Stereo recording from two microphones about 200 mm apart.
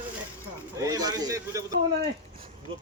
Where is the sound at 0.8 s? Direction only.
15° right (ahead or behind).